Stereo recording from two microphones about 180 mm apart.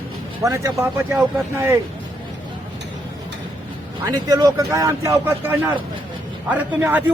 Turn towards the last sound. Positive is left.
turn(degrees=-10)  # may be behind; listen again after turning